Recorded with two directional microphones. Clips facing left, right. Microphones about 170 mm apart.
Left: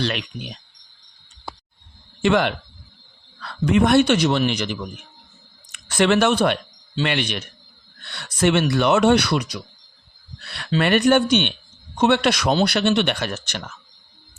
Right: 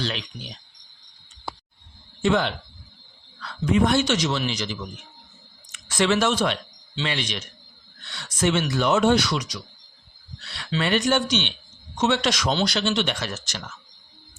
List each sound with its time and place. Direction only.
0.0 s speech: 65° left (ahead or behind)
2.2 s a man's voice: 75° left (ahead or behind)